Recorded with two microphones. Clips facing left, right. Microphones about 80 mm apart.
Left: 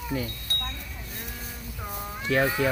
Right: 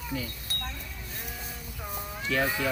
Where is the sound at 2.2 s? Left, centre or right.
Left.